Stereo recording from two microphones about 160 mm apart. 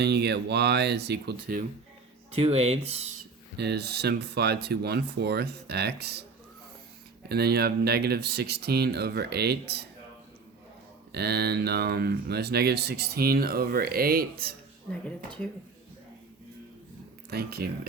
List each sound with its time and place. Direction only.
0.0 s speech: 90° right
2.3 s speech: 40° right (ahead or behind)
3.6 s speech: 90° right
7.3 s speech: 80° right
11.1 s speech: 90° right; by 14.5 s 70° right (ahead or behind)
15.0 s speech: 5° left (ahead or behind)
17.2 s speech: 80° right